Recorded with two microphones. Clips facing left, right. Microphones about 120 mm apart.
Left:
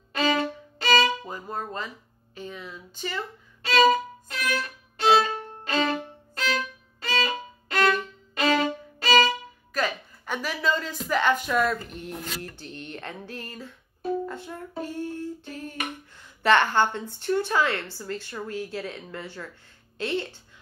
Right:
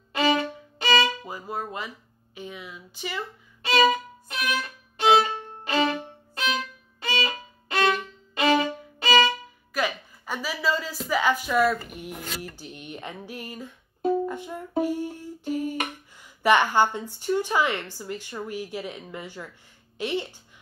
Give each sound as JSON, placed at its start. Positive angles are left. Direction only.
{"t": 0.1, "sound": "violin", "side_deg": -20}
{"t": 2.3, "sound": "a woman's voice", "side_deg": -10}
{"t": 4.3, "sound": "violin", "side_deg": -20}
{"t": 9.8, "sound": "a woman's voice", "side_deg": -10}